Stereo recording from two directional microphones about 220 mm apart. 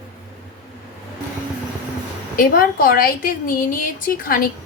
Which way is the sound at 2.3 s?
40° left (ahead or behind).